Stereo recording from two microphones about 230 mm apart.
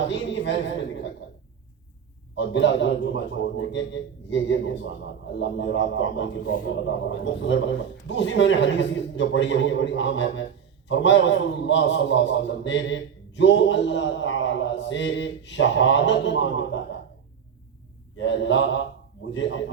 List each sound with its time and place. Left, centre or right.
0.1 s a woman's voice: left
2.3 s a man's voice: left
6.4 s a man's voice: left
6.8 s a man's voice: left
18.2 s a man's voice: left